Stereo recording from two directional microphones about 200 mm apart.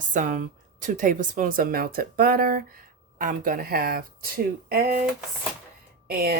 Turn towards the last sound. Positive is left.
turn(degrees=-50)  # may be behind; listen again after turning